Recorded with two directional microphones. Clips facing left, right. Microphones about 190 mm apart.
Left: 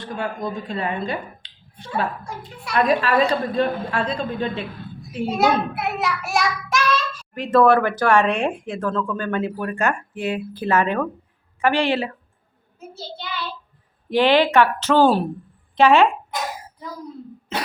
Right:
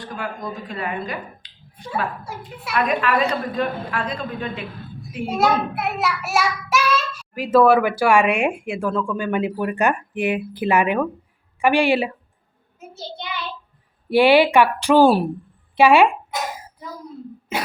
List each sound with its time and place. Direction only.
0.0 s a woman's voice: 25° left (ahead or behind)
2.7 s a woman's voice: 35° left (ahead or behind)
5.4 s a child's voice: centre (ahead or behind)
12.9 s child singing: 15° right (ahead or behind)
14.1 s a child's voice: 10° right (ahead or behind)
17.5 s burping: 10° right (ahead or behind)